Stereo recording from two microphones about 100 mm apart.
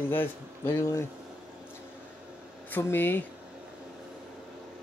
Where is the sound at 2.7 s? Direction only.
20° left (ahead or behind).